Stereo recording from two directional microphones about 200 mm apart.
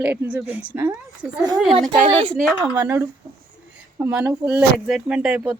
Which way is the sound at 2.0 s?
30° right (ahead or behind).